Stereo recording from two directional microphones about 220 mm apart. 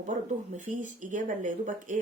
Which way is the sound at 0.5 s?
35° right (ahead or behind).